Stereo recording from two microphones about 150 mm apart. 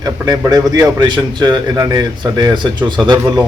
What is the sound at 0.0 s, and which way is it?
Speech, 25° right (ahead or behind).